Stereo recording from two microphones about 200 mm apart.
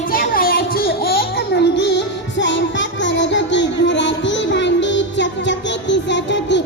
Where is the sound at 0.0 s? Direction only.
45° left (ahead or behind).